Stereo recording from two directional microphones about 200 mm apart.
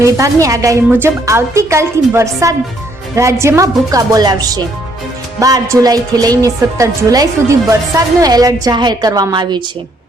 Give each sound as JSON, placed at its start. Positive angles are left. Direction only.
{"t": 0.0, "sound": "a woman's voice", "side_deg": -15}